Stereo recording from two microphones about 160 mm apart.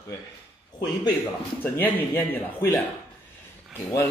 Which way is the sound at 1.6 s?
10° left (ahead or behind).